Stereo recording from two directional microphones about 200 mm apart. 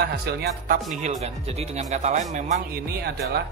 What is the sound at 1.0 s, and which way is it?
Speech, 30° right (ahead or behind).